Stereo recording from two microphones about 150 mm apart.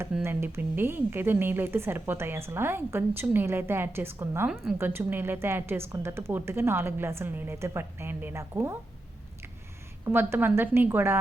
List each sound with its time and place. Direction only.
0.2 s a woman's voice: 15° right (ahead or behind)
10.1 s a woman's voice: 15° right (ahead or behind)